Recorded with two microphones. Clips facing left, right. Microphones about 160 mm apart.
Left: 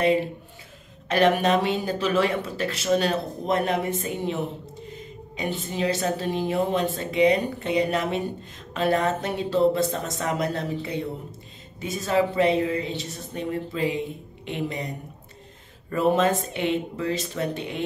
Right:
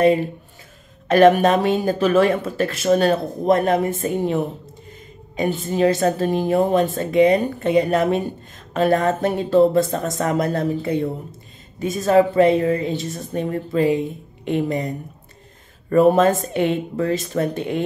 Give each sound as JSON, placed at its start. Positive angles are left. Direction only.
{"t": 1.0, "sound": "a woman's voice", "side_deg": -50}
{"t": 15.9, "sound": "a woman's voice", "side_deg": -50}